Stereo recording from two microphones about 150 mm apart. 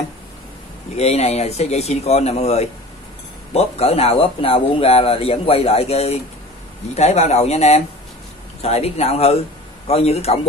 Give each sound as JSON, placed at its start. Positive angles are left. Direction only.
{"t": 0.9, "sound": "speech", "side_deg": 45}